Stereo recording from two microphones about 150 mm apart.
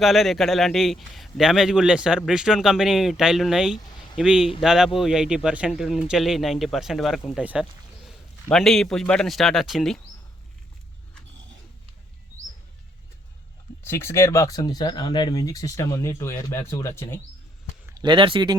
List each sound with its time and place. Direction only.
0.0 s a man's voice: centre (ahead or behind)
7.4 s a sound: 5° right (ahead or behind)
8.4 s a man's voice: centre (ahead or behind)
13.8 s speech: 20° left (ahead or behind)
18.0 s speech: 35° right (ahead or behind)